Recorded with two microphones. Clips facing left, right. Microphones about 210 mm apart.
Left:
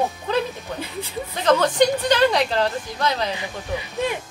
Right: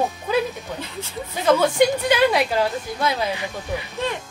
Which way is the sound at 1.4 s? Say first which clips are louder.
Right 1 dB; 10° right (ahead or behind).